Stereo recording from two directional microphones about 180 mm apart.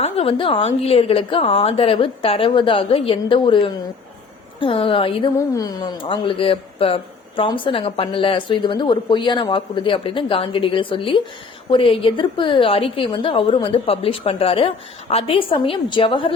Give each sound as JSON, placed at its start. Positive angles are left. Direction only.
{"t": 0.0, "sound": "a woman's voice", "side_deg": 35}